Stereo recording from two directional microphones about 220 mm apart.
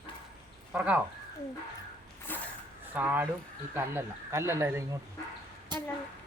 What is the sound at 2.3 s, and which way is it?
Zipper, 10° left (ahead or behind).